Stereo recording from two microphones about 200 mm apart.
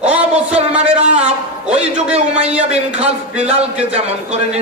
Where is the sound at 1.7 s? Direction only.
35° right (ahead or behind).